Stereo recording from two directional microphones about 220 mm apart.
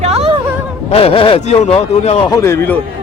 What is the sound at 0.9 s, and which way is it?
Speech, 25° left (ahead or behind).